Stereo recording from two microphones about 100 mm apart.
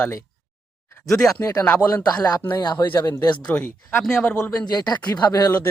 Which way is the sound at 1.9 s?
40° left (ahead or behind).